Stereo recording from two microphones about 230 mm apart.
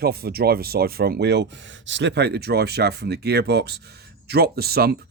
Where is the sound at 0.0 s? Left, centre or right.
Right.